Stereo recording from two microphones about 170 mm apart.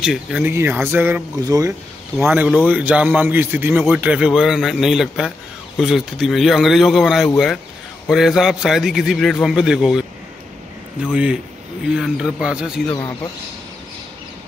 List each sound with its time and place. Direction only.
0.0 s speech: 5° right (ahead or behind)
2.1 s a man's voice: 5° right (ahead or behind)
11.1 s a man's voice: 5° right (ahead or behind)
12.8 s speech: 20° left (ahead or behind)